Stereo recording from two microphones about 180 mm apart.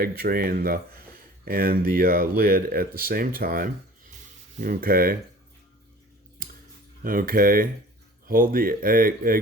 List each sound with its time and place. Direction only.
0.0 s speech: 55° right (ahead or behind)
6.4 s a sound: 50° right (ahead or behind)
7.0 s speech: 50° right (ahead or behind)